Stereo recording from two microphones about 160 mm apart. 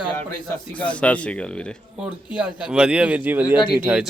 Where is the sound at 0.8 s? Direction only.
10° left (ahead or behind).